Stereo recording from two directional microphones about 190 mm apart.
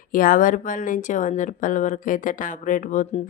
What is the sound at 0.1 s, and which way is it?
Speech, 45° left (ahead or behind).